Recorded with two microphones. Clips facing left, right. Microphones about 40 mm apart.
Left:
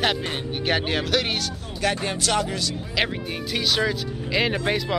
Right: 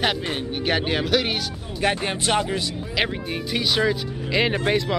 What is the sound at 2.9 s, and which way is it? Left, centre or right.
Speech, centre.